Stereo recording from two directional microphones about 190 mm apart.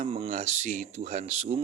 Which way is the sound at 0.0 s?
35° right (ahead or behind).